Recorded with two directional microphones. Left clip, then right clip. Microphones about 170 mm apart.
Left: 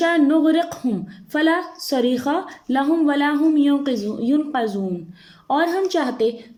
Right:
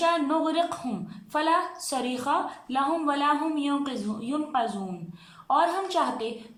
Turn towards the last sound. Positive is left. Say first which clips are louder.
# left 7 dB
turn(degrees=35)  # may be behind; listen again after turning